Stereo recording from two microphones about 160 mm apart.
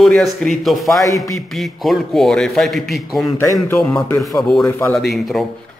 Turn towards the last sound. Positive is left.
turn(degrees=0)  # may be behind; listen again after turning